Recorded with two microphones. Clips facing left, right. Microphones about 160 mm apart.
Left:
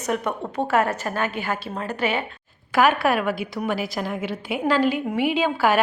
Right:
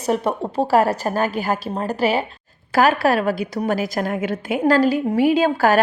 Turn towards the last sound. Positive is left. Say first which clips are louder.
# right 4 dB
turn(degrees=-40)  # may be behind; listen again after turning